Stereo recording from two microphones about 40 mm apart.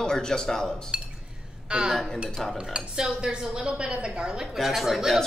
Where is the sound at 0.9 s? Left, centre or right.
Right.